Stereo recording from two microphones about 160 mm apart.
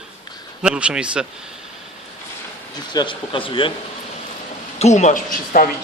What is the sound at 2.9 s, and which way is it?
Speech, 30° left (ahead or behind).